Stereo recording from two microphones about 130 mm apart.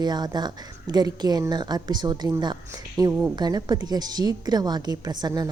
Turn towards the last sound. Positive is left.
turn(degrees=-30)  # may be behind; listen again after turning